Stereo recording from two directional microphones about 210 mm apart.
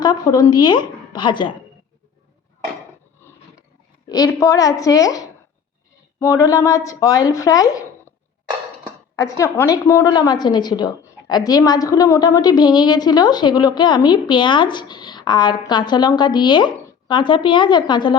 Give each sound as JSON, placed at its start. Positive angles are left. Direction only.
{"t": 0.0, "sound": "a woman's voice", "side_deg": 20}
{"t": 4.0, "sound": "speech", "side_deg": 15}
{"t": 9.1, "sound": "a woman's voice", "side_deg": 15}